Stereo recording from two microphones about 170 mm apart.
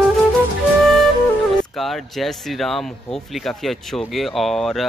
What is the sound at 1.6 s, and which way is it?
Speech, centre (ahead or behind).